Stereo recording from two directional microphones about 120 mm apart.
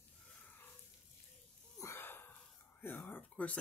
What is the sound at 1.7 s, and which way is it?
Wheeze, 20° left (ahead or behind).